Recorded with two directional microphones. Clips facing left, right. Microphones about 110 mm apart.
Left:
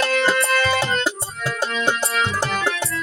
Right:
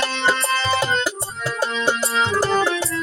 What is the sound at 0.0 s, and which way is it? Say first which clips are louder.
Music: left 2 dB; 25° right (ahead or behind).